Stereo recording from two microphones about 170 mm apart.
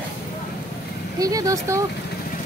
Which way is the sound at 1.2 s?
20° right (ahead or behind).